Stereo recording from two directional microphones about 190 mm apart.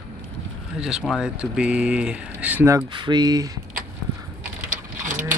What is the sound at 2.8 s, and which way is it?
Speech, 25° right (ahead or behind).